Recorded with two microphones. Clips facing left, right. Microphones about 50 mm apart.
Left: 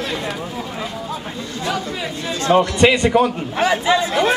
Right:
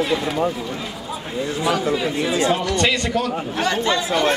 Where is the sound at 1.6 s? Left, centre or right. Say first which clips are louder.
Right 3 dB; centre.